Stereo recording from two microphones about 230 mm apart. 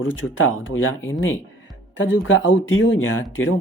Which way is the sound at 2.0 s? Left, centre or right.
Left.